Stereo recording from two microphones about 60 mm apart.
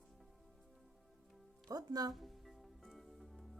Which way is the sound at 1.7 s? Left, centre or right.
Right.